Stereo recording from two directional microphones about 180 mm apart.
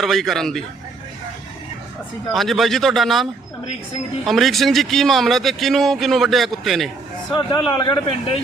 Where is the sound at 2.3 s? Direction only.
Centre (ahead or behind).